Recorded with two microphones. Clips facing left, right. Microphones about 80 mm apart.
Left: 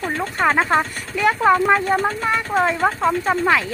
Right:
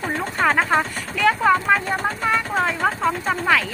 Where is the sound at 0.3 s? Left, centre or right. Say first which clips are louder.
Left 1 dB; centre.